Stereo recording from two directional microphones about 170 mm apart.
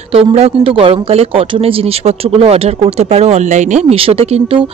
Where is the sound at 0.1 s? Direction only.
35° right (ahead or behind).